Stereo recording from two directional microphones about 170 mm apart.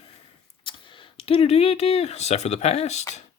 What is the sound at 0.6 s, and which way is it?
Speech, 30° left (ahead or behind).